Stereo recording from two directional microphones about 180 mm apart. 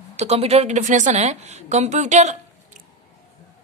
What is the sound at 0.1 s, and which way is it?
A woman's voice, 35° right (ahead or behind).